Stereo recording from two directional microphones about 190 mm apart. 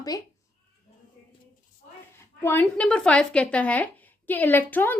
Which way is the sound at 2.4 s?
10° left (ahead or behind).